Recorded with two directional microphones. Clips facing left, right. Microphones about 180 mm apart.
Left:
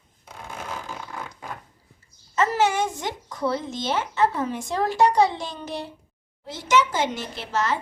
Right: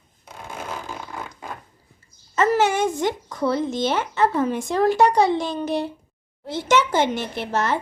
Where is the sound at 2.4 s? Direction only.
55° right (ahead or behind).